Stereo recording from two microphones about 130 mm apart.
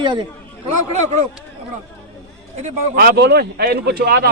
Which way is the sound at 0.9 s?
65° right (ahead or behind).